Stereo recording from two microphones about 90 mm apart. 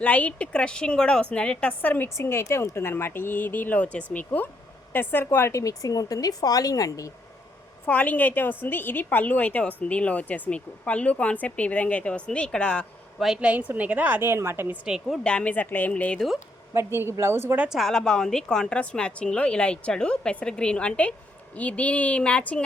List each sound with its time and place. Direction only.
0.0 s a woman's voice: 15° left (ahead or behind); by 7.1 s 40° left (ahead or behind)
7.9 s a woman's voice: 15° left (ahead or behind)
13.1 s a woman's voice: 5° right (ahead or behind); by 14.8 s 25° right (ahead or behind)
14.8 s speech: 5° right (ahead or behind)
15.2 s a woman's voice: 10° left (ahead or behind)
16.7 s a woman's voice: 30° right (ahead or behind)
17.7 s a woman's voice: centre (ahead or behind)